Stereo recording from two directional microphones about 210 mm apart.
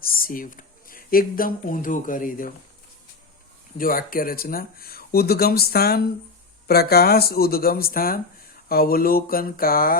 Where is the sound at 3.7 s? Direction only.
40° left (ahead or behind).